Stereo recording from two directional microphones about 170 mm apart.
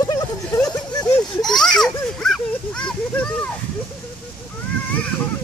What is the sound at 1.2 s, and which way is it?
A child's voice, centre (ahead or behind).